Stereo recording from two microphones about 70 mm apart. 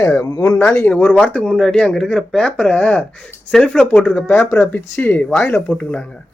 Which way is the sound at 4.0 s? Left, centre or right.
Left.